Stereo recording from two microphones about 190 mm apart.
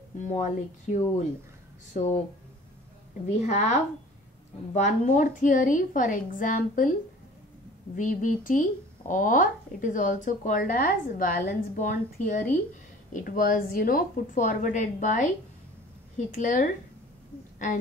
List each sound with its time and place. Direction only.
0.2 s speech: 40° left (ahead or behind)
3.3 s speech: 40° left (ahead or behind)
7.9 s speech: 45° left (ahead or behind)
16.3 s speech: 40° left (ahead or behind)